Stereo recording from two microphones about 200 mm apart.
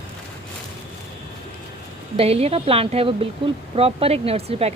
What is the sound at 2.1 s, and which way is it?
Speech, 30° right (ahead or behind).